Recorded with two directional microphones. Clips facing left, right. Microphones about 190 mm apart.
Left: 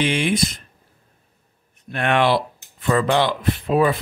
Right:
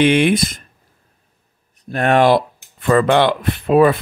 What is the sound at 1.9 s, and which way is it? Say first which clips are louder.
Speech: right 5 dB; 40° right (ahead or behind).